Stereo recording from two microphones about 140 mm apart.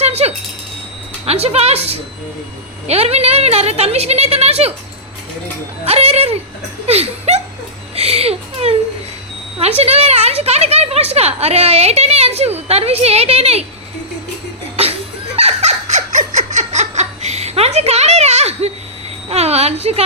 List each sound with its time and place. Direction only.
0.0 s wind chime: 50° right (ahead or behind)
1.2 s a woman's voice: 45° right (ahead or behind)
5.8 s a woman's voice: 45° right (ahead or behind)
7.9 s a sound: 45° right (ahead or behind)
9.6 s a woman's voice: 50° right (ahead or behind)
15.4 s a sound: 50° right (ahead or behind)
19.3 s a woman's voice: 50° right (ahead or behind)